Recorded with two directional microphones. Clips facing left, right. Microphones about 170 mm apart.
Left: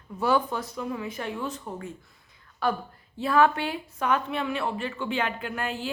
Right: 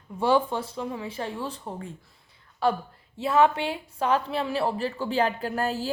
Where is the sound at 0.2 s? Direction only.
25° right (ahead or behind).